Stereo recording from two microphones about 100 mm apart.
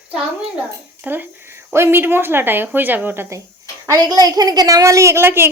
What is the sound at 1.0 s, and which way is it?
Speech, 20° right (ahead or behind).